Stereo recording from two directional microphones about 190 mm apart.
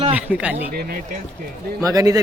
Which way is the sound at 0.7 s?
55° right (ahead or behind).